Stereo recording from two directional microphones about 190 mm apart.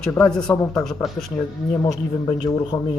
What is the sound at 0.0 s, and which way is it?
Speech, 5° left (ahead or behind).